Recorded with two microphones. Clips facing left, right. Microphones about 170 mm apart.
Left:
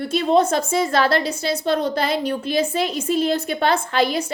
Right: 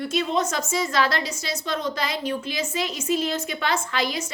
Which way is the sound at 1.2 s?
60° left (ahead or behind).